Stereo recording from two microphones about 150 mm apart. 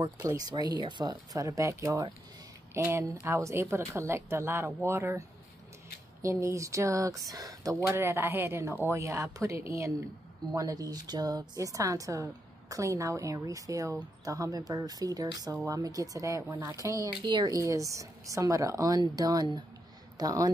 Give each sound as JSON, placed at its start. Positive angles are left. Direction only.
{"t": 0.2, "sound": "a woman's voice", "side_deg": -25}
{"t": 6.2, "sound": "speech", "side_deg": -20}